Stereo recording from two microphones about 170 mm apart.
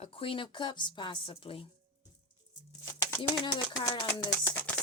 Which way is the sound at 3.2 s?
20° left (ahead or behind).